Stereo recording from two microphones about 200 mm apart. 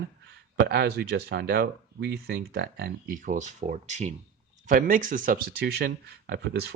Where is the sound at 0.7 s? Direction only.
55° right (ahead or behind).